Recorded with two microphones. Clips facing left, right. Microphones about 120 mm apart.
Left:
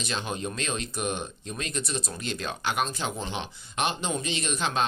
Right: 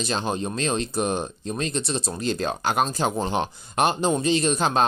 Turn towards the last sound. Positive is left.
turn(degrees=-40)  # may be behind; listen again after turning